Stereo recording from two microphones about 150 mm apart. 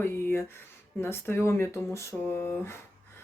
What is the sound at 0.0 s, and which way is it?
Speech, 15° left (ahead or behind).